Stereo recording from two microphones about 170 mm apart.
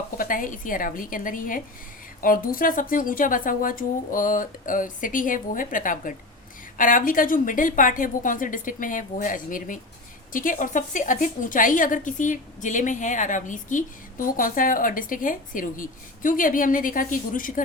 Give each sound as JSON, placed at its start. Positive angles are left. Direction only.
{"t": 0.2, "sound": "a woman's voice", "side_deg": 55}